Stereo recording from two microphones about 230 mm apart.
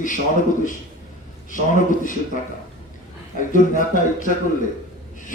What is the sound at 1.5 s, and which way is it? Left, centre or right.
Speech, left.